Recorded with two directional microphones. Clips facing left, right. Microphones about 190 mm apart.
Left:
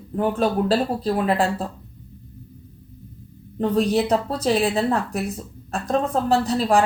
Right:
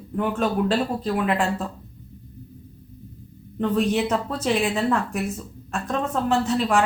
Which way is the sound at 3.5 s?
35° left (ahead or behind).